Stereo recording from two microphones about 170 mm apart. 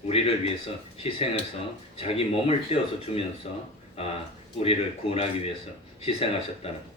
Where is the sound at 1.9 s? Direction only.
35° left (ahead or behind).